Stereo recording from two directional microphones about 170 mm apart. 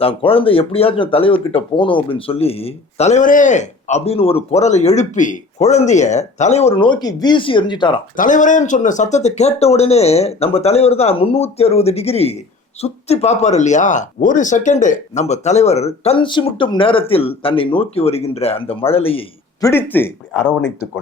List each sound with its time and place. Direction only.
0.0 s speech: 30° left (ahead or behind)
8.1 s speech: 50° left (ahead or behind); by 19.2 s 35° left (ahead or behind)
19.6 s speech: 10° left (ahead or behind)